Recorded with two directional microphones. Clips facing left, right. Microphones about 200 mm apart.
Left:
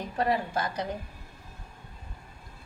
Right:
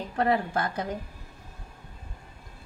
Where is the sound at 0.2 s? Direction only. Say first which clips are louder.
Right 2 dB; 55° right (ahead or behind).